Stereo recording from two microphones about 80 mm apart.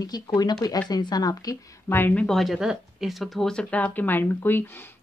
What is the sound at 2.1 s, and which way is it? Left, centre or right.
Speech, centre.